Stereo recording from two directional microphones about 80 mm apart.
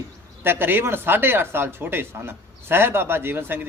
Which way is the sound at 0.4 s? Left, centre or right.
Right.